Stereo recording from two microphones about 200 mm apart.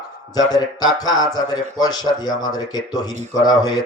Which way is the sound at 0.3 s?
20° left (ahead or behind).